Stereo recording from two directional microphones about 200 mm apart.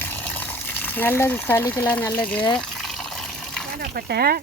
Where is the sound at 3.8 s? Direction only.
50° right (ahead or behind).